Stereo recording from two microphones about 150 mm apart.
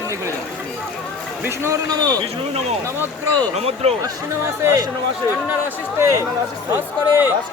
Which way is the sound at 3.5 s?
45° right (ahead or behind).